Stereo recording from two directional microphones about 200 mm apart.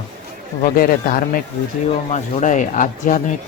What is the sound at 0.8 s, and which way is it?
Speech, 45° left (ahead or behind).